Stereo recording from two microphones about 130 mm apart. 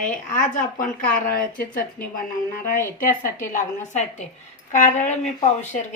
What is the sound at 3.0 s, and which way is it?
A woman's voice, 90° left.